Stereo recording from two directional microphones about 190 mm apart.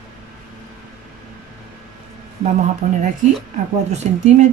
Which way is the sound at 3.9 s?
35° right (ahead or behind).